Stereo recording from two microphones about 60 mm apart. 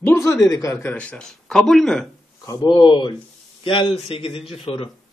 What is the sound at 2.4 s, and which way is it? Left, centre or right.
Speech, left.